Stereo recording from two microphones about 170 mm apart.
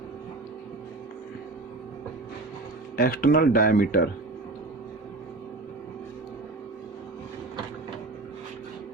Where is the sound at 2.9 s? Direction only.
60° left (ahead or behind).